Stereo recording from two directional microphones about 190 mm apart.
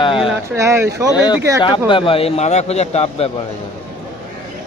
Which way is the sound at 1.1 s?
20° left (ahead or behind).